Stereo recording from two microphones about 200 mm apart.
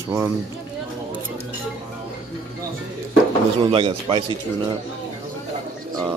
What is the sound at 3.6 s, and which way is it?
Speech, 25° right (ahead or behind).